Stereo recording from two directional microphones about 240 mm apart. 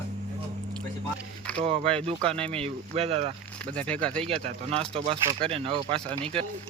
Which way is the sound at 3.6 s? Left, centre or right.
Centre.